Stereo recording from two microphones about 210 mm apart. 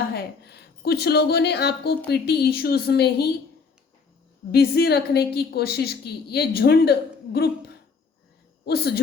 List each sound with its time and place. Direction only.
0.1 s a woman's voice: 50° left (ahead or behind)
4.5 s a woman's voice: 50° left (ahead or behind)